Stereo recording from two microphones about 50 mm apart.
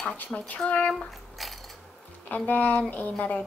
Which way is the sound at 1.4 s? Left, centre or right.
Centre.